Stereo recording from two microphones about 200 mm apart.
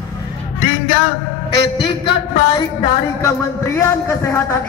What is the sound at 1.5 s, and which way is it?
A man's voice, 25° left (ahead or behind).